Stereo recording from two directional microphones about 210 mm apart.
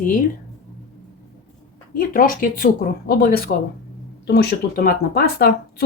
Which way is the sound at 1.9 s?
45° left (ahead or behind).